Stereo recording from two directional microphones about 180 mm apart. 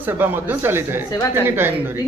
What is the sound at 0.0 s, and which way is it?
A man's voice, 10° right (ahead or behind).